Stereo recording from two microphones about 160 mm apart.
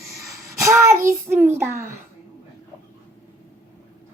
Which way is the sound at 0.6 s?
20° right (ahead or behind).